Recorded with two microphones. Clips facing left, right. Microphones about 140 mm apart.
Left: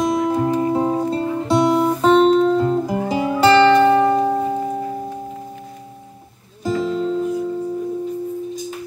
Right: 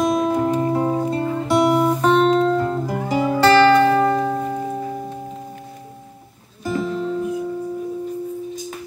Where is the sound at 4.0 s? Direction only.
15° left (ahead or behind).